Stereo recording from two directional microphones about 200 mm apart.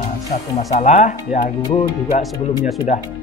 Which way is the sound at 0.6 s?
35° left (ahead or behind).